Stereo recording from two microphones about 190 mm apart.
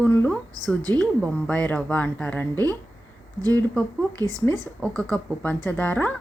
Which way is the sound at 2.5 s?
20° right (ahead or behind).